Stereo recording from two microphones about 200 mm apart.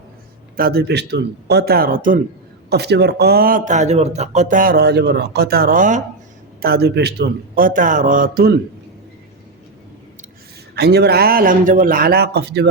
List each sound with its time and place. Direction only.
0.5 s speech: 50° right (ahead or behind)
2.6 s speech: 55° right (ahead or behind)
6.6 s speech: 50° right (ahead or behind)
10.8 s speech: 55° right (ahead or behind)